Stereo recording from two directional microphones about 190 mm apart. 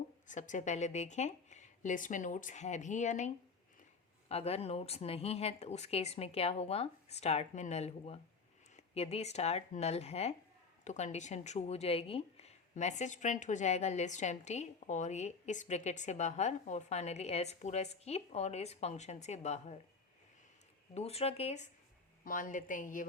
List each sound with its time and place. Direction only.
0.3 s speech: 40° left (ahead or behind)
20.9 s a woman's voice: 35° left (ahead or behind)